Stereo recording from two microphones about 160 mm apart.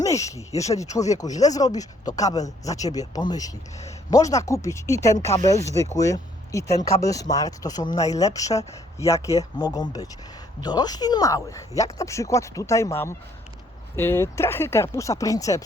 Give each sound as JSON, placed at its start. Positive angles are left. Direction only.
{"t": 0.0, "sound": "speech", "side_deg": 20}
{"t": 5.1, "sound": "speech", "side_deg": 40}
{"t": 6.0, "sound": "speech", "side_deg": 20}